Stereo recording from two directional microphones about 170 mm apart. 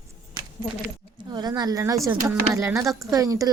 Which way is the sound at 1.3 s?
25° right (ahead or behind).